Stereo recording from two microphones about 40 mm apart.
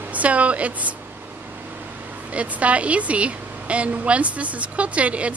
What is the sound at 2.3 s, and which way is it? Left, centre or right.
A woman's voice, right.